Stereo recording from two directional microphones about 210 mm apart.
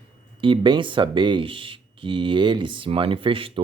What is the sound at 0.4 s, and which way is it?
Speech, 25° right (ahead or behind).